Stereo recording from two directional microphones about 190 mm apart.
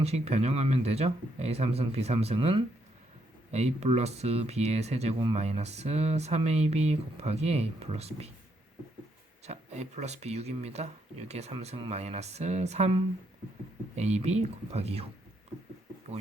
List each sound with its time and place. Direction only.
0.0 s speech: 35° right (ahead or behind)
9.5 s speech: 35° right (ahead or behind)